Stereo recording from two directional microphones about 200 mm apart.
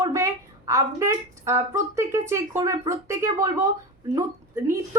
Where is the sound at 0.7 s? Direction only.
15° right (ahead or behind).